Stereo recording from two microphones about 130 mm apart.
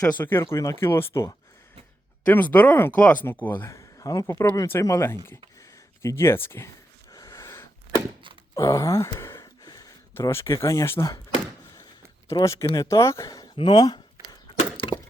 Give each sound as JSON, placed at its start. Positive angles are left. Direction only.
{"t": 0.1, "sound": "speech", "side_deg": 15}
{"t": 7.1, "sound": "a sound", "side_deg": 25}
{"t": 8.5, "sound": "speech", "side_deg": 25}
{"t": 12.3, "sound": "speech", "side_deg": 25}